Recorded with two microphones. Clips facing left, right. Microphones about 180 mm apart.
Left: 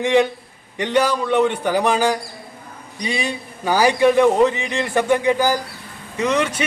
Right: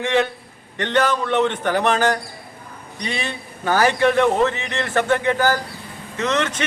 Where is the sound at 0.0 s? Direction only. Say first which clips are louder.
Left 3 dB; 15° left (ahead or behind).